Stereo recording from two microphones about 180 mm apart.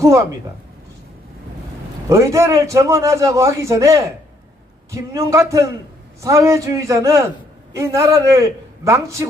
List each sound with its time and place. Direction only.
2.0 s a man's voice: 15° right (ahead or behind)